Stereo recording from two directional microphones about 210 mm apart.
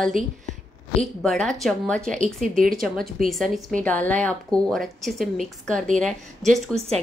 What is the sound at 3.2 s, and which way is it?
A woman's voice, centre (ahead or behind).